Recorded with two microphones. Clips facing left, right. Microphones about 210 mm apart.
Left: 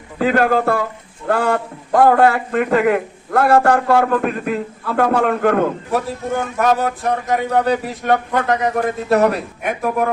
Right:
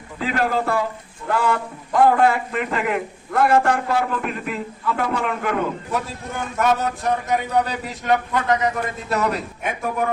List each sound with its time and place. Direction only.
0.2 s a man's voice: 55° left (ahead or behind)